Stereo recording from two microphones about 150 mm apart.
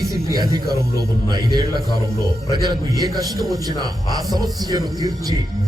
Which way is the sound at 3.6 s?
25° right (ahead or behind).